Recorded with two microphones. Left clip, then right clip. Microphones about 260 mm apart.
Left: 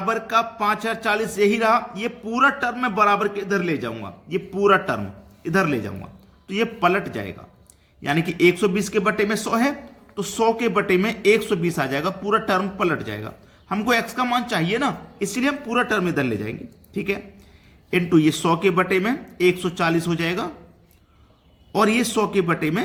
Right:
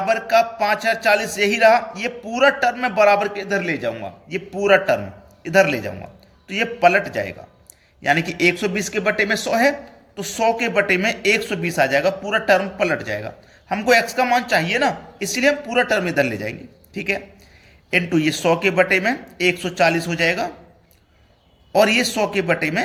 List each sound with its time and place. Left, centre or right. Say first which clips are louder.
0.1 s a man's voice: right 4 dB; centre
21.8 s speech: right 4 dB; centre